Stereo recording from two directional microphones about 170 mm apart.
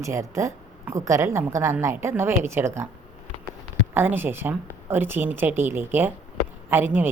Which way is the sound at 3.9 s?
10° right (ahead or behind).